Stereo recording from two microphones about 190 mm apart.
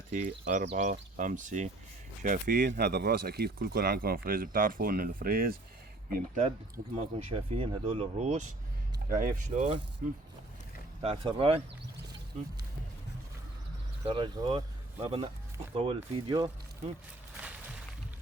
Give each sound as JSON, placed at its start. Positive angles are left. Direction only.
{"t": 0.1, "sound": "speech", "side_deg": -40}
{"t": 6.9, "sound": "speech", "side_deg": -30}
{"t": 9.0, "sound": "speech", "side_deg": -45}
{"t": 11.0, "sound": "speech", "side_deg": -30}
{"t": 14.0, "sound": "speech", "side_deg": -25}
{"t": 17.3, "sound": "a sound", "side_deg": -5}